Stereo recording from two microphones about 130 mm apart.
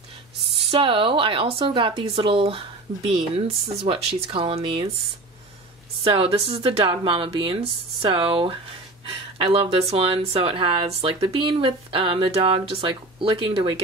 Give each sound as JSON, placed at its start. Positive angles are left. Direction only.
{"t": 0.7, "sound": "speech", "side_deg": -45}
{"t": 6.0, "sound": "speech", "side_deg": -45}